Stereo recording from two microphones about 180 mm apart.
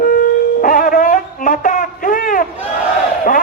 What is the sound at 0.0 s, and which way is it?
Wind instrument, 50° left (ahead or behind).